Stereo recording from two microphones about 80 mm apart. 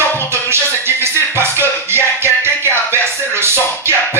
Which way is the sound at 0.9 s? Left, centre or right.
Right.